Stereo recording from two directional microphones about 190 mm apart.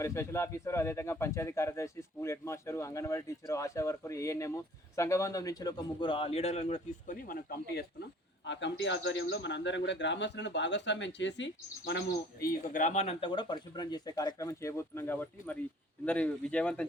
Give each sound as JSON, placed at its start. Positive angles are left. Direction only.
{"t": 0.0, "sound": "a man's voice", "side_deg": 15}
{"t": 8.8, "sound": "speech", "side_deg": 75}